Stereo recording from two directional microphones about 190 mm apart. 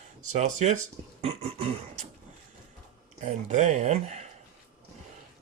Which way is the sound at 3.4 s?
40° right (ahead or behind).